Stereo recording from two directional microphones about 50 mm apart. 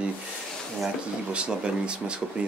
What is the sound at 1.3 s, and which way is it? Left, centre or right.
Speech, right.